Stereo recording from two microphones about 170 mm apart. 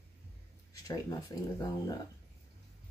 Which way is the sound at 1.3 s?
20° left (ahead or behind).